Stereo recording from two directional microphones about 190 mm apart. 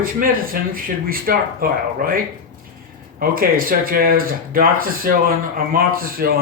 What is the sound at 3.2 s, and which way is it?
Speech, 50° right (ahead or behind).